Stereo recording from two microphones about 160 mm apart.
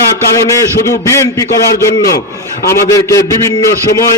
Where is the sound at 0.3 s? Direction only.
20° left (ahead or behind).